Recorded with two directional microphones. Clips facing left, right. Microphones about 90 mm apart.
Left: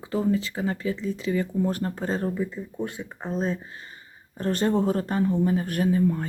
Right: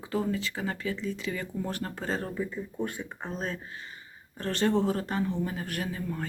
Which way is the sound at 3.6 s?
35° left (ahead or behind).